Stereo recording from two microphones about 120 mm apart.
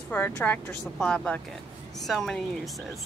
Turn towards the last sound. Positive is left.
turn(degrees=0)  # may be behind; listen again after turning